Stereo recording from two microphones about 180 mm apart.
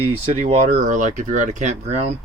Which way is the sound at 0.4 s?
40° right (ahead or behind).